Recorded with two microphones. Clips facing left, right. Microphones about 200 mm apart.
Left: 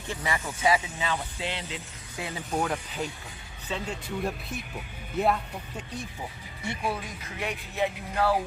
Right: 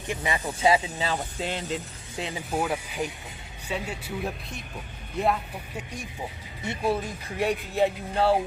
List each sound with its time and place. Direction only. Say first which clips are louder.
0.1 s speech: right 3 dB; 20° right (ahead or behind); by 1.8 s 45° right (ahead or behind)
2.1 s speech: right 3 dB; 20° right (ahead or behind)
2.5 s speech: even; 5° right (ahead or behind)
7.3 s speech: right 6 dB; 35° right (ahead or behind)